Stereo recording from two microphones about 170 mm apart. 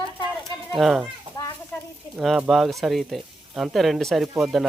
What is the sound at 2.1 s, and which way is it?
Speech, centre (ahead or behind).